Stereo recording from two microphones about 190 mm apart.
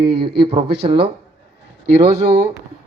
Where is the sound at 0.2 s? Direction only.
25° right (ahead or behind).